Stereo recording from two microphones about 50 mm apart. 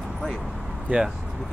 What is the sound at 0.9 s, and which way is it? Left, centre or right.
Speech, right.